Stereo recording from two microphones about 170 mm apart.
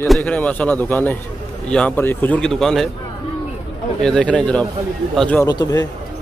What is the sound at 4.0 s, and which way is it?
A man's voice, 5° left (ahead or behind).